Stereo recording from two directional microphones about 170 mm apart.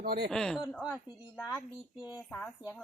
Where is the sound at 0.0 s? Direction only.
65° right (ahead or behind).